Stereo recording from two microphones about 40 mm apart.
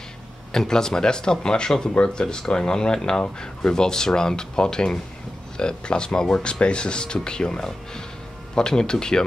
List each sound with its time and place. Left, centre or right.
0.5 s speech: centre